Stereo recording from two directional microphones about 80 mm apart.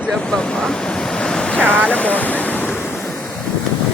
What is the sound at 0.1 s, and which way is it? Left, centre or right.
Speech, centre.